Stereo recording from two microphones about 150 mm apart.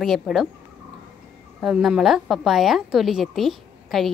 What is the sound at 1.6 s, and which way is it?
A woman's voice, 5° right (ahead or behind).